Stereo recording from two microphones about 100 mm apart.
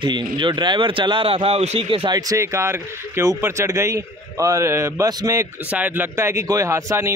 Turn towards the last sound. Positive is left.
turn(degrees=-30)  # may be behind; listen again after turning